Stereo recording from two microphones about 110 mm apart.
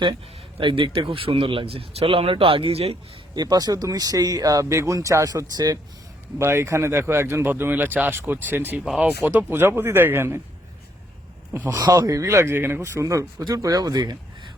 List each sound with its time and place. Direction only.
0.6 s speech: 50° right (ahead or behind)
3.3 s speech: 35° right (ahead or behind); by 10.4 s 20° right (ahead or behind)
11.7 s speech: 30° right (ahead or behind)